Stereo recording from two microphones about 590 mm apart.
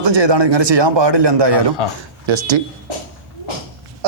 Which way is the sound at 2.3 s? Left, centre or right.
Right.